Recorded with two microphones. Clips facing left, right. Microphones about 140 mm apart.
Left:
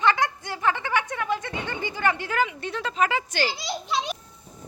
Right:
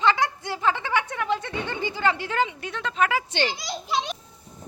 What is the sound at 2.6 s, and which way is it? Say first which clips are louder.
Speech: even; centre (ahead or behind).